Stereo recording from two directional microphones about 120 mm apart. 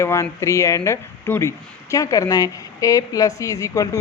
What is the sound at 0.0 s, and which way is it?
Speech, 25° left (ahead or behind).